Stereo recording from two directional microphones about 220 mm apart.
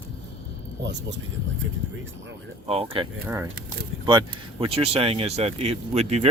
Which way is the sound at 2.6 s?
25° right (ahead or behind).